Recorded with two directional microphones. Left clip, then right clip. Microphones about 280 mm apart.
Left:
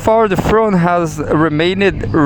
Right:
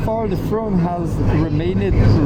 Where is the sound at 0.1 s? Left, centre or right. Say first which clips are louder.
Left 11 dB; left.